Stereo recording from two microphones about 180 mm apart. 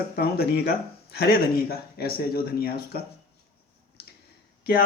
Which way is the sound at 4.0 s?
60° left (ahead or behind).